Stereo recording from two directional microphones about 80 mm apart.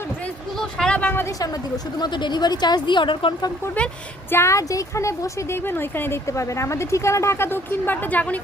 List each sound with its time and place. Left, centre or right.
0.6 s a sound: centre
0.9 s a woman's voice: centre
1.4 s a woman's voice: left
2.1 s speech: left
4.3 s speech: left
5.6 s speech: left